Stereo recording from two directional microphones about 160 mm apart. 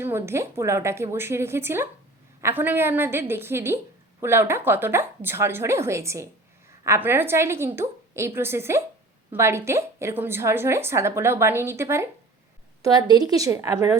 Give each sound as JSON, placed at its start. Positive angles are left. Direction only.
{"t": 0.0, "sound": "a woman's voice", "side_deg": -15}